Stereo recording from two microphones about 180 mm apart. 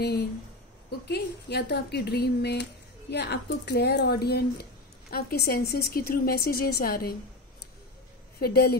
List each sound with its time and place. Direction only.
0.0 s speech: 65° left (ahead or behind)
8.4 s speech: 60° left (ahead or behind)